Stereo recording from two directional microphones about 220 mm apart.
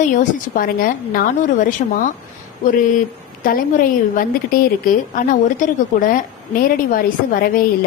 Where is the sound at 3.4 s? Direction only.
40° left (ahead or behind).